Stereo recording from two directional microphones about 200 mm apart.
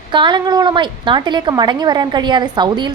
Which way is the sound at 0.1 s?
25° right (ahead or behind).